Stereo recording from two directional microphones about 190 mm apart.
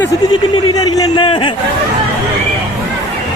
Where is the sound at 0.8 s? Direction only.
20° left (ahead or behind).